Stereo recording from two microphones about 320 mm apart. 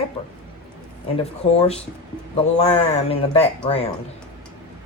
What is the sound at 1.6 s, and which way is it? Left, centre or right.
Speech, centre.